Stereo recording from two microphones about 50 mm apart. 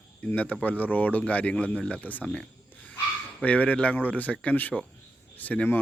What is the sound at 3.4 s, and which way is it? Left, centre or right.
Speech, left.